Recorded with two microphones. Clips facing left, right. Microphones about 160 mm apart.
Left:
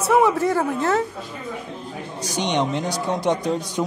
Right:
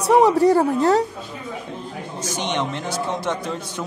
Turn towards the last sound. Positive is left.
turn(degrees=15)  # may be behind; listen again after turning